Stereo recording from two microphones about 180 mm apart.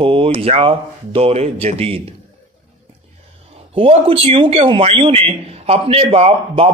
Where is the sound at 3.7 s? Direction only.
30° right (ahead or behind).